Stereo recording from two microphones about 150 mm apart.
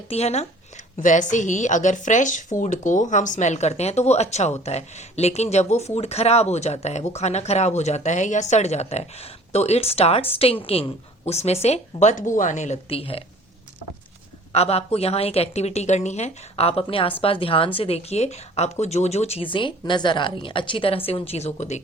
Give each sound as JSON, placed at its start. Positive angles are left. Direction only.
{"t": 0.1, "sound": "a woman's voice", "side_deg": 45}
{"t": 0.9, "sound": "a woman's voice", "side_deg": 55}
{"t": 14.5, "sound": "a woman's voice", "side_deg": 45}